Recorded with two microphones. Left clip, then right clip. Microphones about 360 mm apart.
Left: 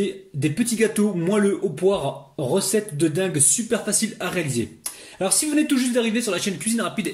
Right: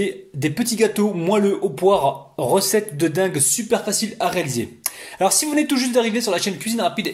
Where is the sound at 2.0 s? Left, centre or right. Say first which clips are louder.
Right 7 dB; right.